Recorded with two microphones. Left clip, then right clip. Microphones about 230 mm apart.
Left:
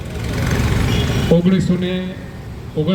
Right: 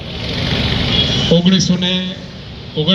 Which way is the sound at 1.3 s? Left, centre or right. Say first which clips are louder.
Right 3 dB; left.